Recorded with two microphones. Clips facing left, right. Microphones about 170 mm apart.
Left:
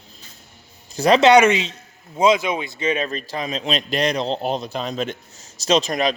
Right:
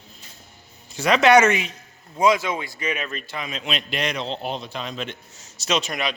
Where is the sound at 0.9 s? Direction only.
35° left (ahead or behind).